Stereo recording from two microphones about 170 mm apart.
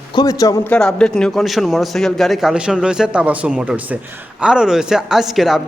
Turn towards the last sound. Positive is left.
turn(degrees=0)  # may be behind; listen again after turning